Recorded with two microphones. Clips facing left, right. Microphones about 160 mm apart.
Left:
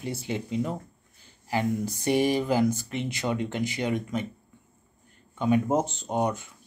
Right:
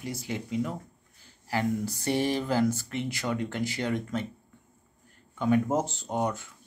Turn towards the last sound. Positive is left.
turn(degrees=20)  # may be behind; listen again after turning